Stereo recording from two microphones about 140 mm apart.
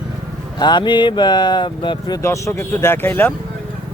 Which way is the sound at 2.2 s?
20° left (ahead or behind).